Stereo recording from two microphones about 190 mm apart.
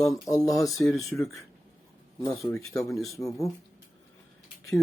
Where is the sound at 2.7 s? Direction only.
15° left (ahead or behind).